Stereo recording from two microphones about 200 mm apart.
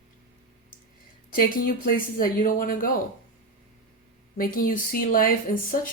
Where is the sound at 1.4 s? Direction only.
45° left (ahead or behind).